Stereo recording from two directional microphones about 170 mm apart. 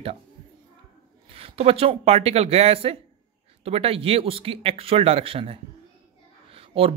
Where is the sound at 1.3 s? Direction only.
35° right (ahead or behind).